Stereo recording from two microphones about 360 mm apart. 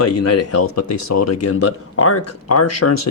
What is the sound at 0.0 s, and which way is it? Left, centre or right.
Speech, left.